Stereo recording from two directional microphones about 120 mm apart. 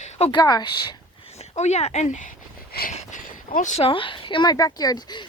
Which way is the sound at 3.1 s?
90° left.